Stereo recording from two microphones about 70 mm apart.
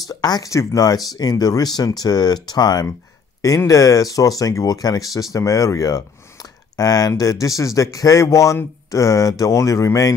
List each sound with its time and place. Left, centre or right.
0.1 s speech: left
0.5 s speech: left
3.4 s speech: left